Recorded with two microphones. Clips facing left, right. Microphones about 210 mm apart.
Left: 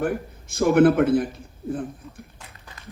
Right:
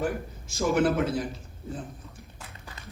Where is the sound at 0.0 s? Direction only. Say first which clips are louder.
Left 4 dB; 55° left (ahead or behind).